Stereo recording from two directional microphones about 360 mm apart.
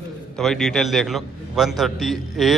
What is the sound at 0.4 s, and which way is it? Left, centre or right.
A man's voice, centre.